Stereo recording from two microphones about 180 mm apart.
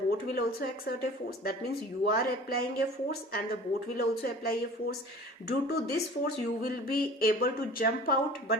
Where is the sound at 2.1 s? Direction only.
55° left (ahead or behind).